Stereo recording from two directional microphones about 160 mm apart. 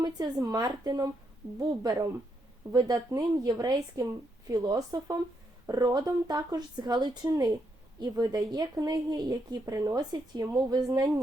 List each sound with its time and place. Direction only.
0.0 s a woman's voice: 25° right (ahead or behind)